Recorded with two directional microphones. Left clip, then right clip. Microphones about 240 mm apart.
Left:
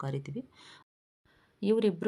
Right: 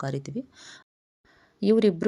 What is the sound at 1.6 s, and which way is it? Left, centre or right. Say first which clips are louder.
Speech: right 6 dB; right.